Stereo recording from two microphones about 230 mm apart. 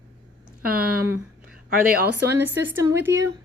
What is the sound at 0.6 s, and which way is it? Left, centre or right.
Speech, right.